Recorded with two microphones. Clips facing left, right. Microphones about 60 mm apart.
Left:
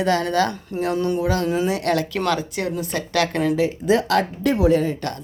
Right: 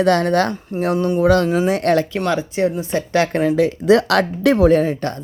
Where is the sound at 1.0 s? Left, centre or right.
Right.